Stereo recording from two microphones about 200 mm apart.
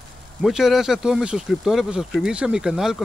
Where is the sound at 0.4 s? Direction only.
Centre (ahead or behind).